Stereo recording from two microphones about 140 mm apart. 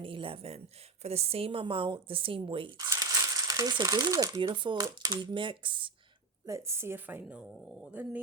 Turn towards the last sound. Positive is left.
turn(degrees=0)  # may be behind; listen again after turning